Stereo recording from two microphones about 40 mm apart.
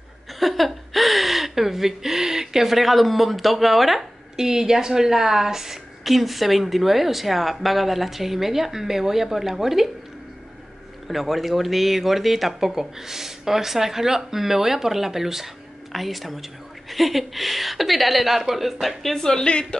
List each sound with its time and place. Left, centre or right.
0.4 s speech: centre
4.4 s a woman's voice: centre
11.1 s a woman's voice: centre
19.1 s a woman's voice: centre